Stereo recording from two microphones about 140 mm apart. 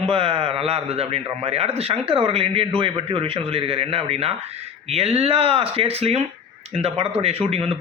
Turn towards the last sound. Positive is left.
turn(degrees=-45)  # may be behind; listen again after turning